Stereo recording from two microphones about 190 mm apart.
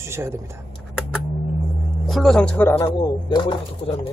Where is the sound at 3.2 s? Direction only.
25° left (ahead or behind).